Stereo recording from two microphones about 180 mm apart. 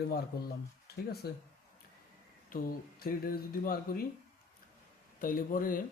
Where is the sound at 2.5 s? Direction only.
55° left (ahead or behind).